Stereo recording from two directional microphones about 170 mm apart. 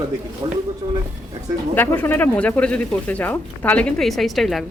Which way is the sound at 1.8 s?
10° left (ahead or behind).